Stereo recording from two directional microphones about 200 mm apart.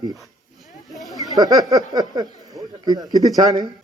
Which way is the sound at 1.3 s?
20° right (ahead or behind).